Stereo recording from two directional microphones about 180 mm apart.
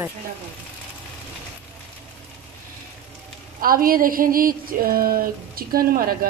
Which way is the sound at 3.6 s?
55° right (ahead or behind).